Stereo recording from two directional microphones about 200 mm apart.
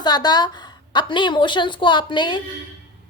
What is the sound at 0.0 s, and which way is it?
A woman's voice, 20° left (ahead or behind).